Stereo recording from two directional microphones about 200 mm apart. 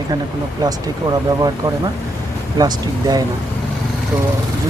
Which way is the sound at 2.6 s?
20° right (ahead or behind).